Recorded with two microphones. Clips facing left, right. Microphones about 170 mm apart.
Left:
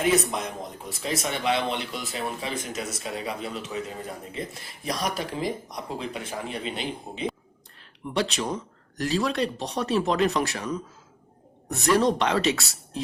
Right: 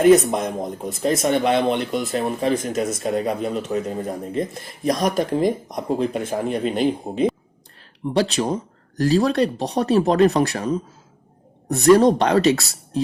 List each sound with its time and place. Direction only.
0.0 s speech: 45° right (ahead or behind)
8.0 s speech: 35° right (ahead or behind)